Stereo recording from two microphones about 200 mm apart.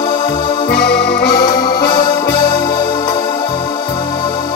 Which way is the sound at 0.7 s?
55° left (ahead or behind).